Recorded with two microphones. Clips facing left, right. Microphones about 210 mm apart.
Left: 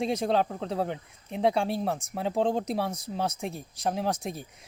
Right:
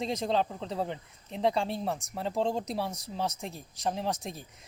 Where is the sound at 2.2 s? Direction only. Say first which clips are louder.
Left 4 dB; centre (ahead or behind).